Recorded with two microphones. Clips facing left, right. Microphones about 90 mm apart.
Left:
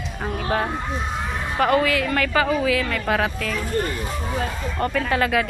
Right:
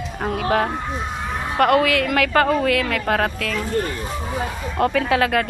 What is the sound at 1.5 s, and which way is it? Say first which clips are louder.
Speech: right 3 dB; 65° right (ahead or behind).